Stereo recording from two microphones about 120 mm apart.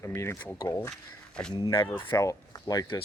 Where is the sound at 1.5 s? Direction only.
30° left (ahead or behind).